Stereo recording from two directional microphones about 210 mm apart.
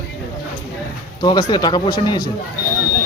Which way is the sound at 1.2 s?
20° left (ahead or behind).